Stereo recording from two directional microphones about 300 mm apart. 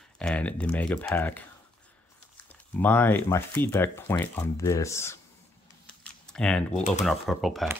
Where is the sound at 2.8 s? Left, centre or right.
Centre.